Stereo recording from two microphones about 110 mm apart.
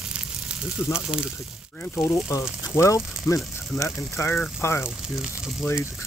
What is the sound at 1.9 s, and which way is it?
Speech, 25° left (ahead or behind).